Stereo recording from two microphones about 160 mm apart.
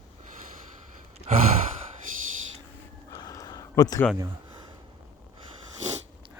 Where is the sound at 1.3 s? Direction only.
45° right (ahead or behind).